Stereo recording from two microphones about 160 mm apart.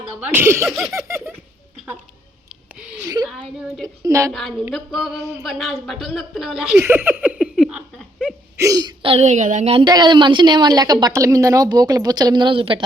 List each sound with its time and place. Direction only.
0.2 s speech: 10° right (ahead or behind)
0.7 s a woman's voice: centre (ahead or behind)
0.9 s a sound: 15° right (ahead or behind)
3.2 s a woman's voice: centre (ahead or behind)
3.8 s a woman's voice: 20° right (ahead or behind)
4.3 s a woman's voice: centre (ahead or behind)
6.7 s giggle: 15° right (ahead or behind)
8.5 s a woman's voice: 20° right (ahead or behind); by 9.7 s 50° right (ahead or behind)
9.7 s a woman's voice: 25° right (ahead or behind)